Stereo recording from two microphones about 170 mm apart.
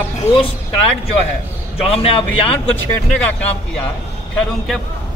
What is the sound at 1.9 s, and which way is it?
Speech, 35° left (ahead or behind).